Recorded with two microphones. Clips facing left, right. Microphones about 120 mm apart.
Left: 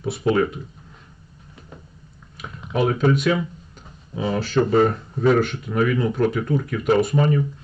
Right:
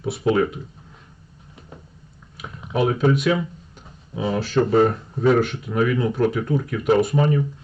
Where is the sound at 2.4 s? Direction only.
5° right (ahead or behind).